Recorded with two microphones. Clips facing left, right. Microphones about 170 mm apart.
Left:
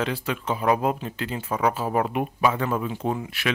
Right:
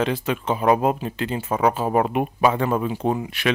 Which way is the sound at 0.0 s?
25° right (ahead or behind).